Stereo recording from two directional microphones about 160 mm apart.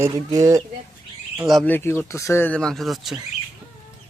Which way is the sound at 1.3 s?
Centre (ahead or behind).